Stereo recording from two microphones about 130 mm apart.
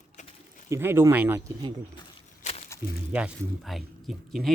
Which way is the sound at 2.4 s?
55° left (ahead or behind).